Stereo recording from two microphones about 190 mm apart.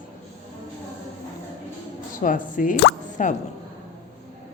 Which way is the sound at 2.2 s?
45° left (ahead or behind).